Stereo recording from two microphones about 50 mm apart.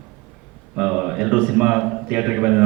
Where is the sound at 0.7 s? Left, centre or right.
Centre.